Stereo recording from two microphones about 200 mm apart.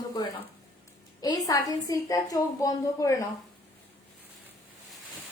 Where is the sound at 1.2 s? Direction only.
20° left (ahead or behind).